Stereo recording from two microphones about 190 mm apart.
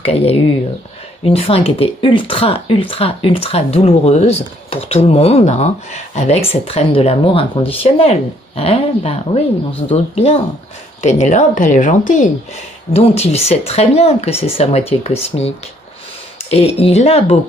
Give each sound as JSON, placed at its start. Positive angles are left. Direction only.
{"t": 0.0, "sound": "speech", "side_deg": 35}
{"t": 16.4, "sound": "speech", "side_deg": 30}